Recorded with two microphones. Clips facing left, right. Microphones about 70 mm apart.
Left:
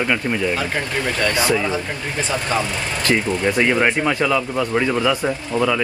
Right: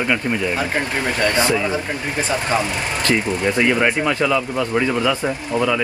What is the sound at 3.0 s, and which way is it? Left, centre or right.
Speech, left.